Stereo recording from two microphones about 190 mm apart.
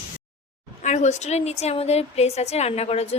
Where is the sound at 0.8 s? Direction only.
40° left (ahead or behind).